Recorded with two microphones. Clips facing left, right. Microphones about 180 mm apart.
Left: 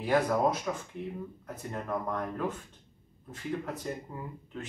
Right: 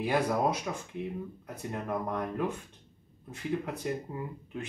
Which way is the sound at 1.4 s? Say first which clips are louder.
Right 1 dB; 15° right (ahead or behind).